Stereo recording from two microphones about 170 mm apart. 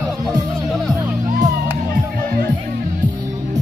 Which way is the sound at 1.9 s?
55° right (ahead or behind).